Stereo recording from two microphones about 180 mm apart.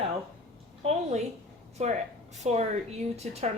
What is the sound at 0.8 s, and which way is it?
A woman's voice, 35° right (ahead or behind).